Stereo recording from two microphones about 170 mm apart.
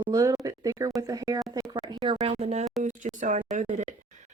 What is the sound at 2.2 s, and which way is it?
Speech, 40° right (ahead or behind).